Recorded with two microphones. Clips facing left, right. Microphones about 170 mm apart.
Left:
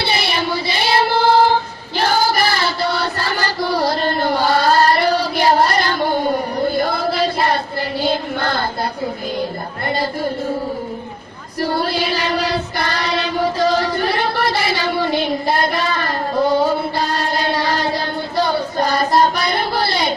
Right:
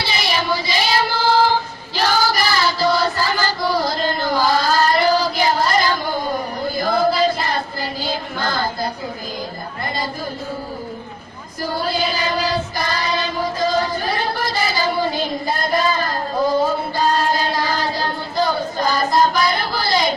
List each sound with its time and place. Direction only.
0.0 s child singing: 60° left (ahead or behind)
9.8 s music: 65° left (ahead or behind)
11.6 s child singing: 65° left (ahead or behind)